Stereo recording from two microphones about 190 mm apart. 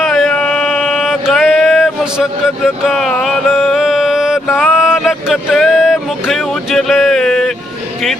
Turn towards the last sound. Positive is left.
turn(degrees=0)  # may be behind; listen again after turning